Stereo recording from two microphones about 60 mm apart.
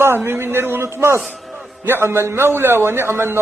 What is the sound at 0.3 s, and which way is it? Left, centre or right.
A man's voice, right.